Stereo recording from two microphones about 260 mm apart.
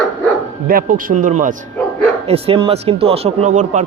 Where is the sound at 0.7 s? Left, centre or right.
Right.